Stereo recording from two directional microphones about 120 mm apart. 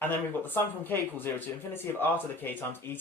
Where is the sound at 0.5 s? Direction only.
15° left (ahead or behind).